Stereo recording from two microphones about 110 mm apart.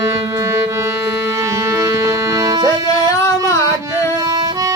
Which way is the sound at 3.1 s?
25° left (ahead or behind).